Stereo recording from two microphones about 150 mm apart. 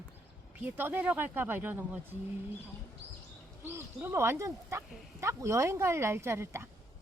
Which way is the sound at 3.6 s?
15° right (ahead or behind).